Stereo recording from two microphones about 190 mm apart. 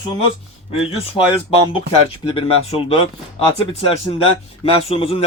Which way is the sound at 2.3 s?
30° left (ahead or behind).